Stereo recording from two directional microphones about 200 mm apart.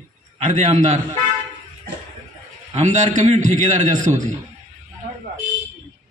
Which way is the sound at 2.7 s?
40° right (ahead or behind).